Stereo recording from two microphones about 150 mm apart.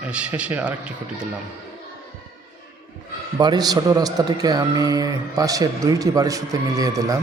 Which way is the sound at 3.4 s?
25° right (ahead or behind).